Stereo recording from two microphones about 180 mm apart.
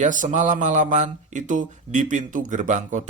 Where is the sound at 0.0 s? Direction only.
45° right (ahead or behind).